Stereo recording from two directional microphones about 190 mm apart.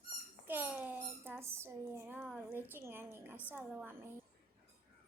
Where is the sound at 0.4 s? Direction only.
10° right (ahead or behind).